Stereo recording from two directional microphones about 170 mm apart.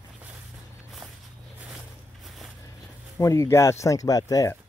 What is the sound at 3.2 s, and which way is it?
Speech, 15° left (ahead or behind).